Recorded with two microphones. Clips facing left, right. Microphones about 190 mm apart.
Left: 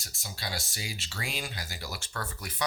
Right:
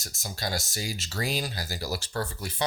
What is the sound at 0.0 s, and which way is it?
Speech, 45° right (ahead or behind).